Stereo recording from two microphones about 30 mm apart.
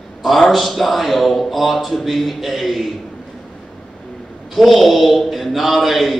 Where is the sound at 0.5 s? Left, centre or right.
Centre.